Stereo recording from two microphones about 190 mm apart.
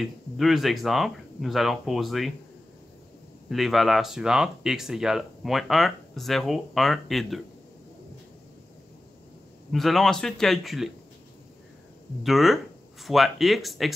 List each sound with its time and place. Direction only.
0.0 s speech: centre (ahead or behind)
3.4 s speech: centre (ahead or behind)
9.7 s speech: centre (ahead or behind)
12.2 s speech: centre (ahead or behind)